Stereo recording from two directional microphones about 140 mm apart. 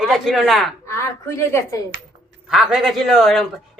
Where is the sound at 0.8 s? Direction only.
20° left (ahead or behind).